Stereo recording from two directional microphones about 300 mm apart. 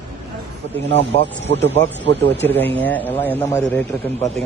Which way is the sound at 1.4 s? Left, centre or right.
Right.